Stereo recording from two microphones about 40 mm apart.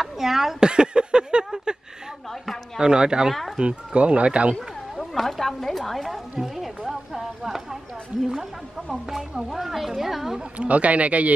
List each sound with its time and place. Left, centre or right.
0.0 s speech: centre
0.6 s a sound: right
2.8 s speech: centre
3.6 s speech: right
5.1 s a sound: centre
6.4 s music: centre
6.9 s a sound: centre
8.9 s music: centre
10.6 s a man's voice: right